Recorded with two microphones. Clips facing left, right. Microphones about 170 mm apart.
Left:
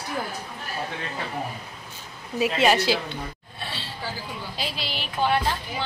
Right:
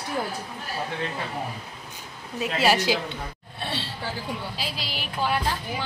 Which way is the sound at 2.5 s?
10° right (ahead or behind).